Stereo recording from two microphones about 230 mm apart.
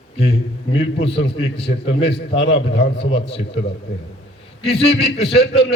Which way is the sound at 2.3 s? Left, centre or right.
Left.